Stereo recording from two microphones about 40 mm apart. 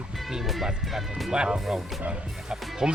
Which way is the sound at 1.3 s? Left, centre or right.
Centre.